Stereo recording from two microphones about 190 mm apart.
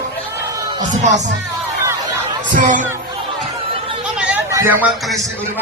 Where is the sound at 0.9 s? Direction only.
40° right (ahead or behind).